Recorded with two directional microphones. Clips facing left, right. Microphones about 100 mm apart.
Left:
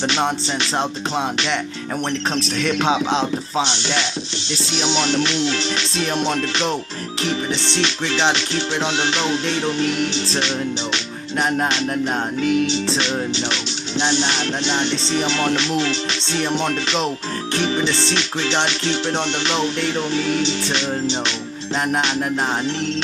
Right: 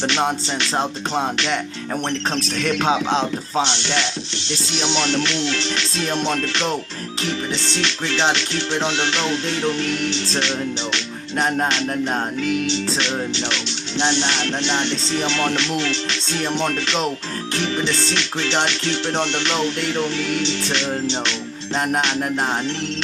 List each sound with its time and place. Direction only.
0.0 s music: 15° left (ahead or behind)
2.0 s music: 15° left (ahead or behind)
3.1 s speech: 45° right (ahead or behind)
3.6 s music: 15° left (ahead or behind)
11.7 s music: 15° left (ahead or behind)
22.4 s music: 15° left (ahead or behind)